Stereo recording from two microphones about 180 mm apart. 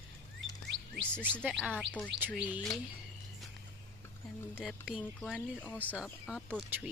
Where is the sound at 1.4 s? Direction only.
5° right (ahead or behind).